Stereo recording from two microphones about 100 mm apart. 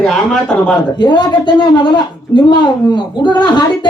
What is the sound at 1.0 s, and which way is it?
A woman's voice, 50° left (ahead or behind).